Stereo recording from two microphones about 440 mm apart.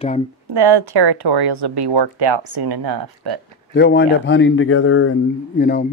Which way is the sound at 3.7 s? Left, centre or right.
Left.